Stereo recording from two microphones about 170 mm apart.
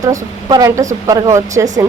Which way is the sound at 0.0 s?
20° right (ahead or behind).